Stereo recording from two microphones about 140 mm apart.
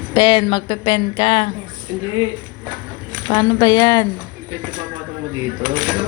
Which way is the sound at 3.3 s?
25° left (ahead or behind).